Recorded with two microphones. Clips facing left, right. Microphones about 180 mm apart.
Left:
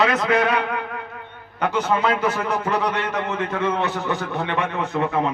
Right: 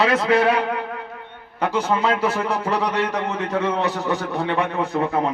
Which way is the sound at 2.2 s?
30° right (ahead or behind).